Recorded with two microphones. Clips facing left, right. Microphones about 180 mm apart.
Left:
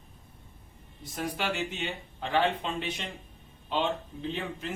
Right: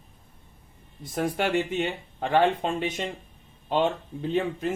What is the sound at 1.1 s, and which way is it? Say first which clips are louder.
Speech: right 7 dB; 50° right (ahead or behind).